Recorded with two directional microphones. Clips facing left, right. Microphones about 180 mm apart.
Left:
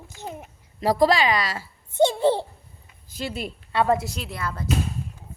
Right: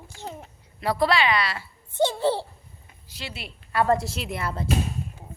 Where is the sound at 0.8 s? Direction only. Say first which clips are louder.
Left 3 dB; 40° left (ahead or behind).